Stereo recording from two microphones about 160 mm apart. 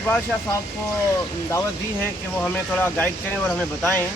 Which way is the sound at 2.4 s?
10° left (ahead or behind).